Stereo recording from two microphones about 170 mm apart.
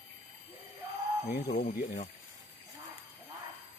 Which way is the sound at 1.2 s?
70° left (ahead or behind).